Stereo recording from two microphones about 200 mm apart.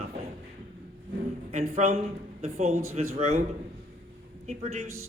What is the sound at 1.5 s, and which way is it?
A man's voice, 35° right (ahead or behind).